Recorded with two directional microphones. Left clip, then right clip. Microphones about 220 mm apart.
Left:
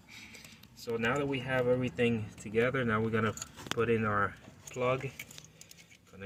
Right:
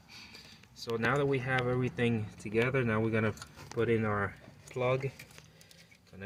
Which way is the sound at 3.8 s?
35° right (ahead or behind).